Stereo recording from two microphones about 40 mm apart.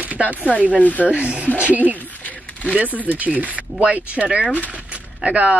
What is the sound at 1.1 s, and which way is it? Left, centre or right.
Speech, right.